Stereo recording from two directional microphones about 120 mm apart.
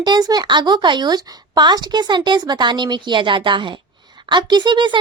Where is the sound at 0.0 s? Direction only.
35° right (ahead or behind).